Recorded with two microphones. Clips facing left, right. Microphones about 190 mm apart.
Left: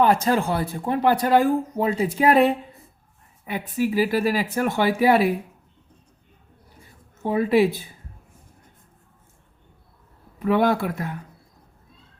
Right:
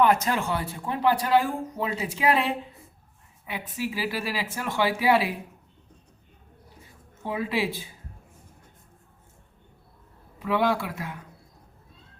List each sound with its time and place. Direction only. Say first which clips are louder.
0.0 s speech: left 3 dB; 35° left (ahead or behind)
3.8 s speech: left 9 dB; 45° left (ahead or behind)
7.2 s a woman's voice: left 9 dB; 45° left (ahead or behind)
10.4 s speech: left 5 dB; 45° left (ahead or behind)